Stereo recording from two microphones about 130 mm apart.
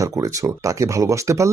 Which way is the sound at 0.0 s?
25° right (ahead or behind).